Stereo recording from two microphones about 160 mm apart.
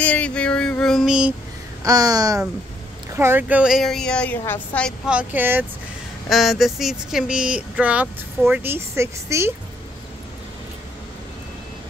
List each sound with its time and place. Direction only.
0.0 s female singing: 10° left (ahead or behind)
1.8 s a woman's voice: 20° right (ahead or behind); by 4.9 s 10° left (ahead or behind)
5.0 s speech: 10° right (ahead or behind)
6.2 s speech: centre (ahead or behind); by 9.5 s 15° right (ahead or behind)